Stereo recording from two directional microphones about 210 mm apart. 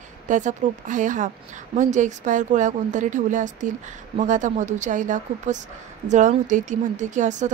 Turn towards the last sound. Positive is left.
turn(degrees=-35)  # may be behind; listen again after turning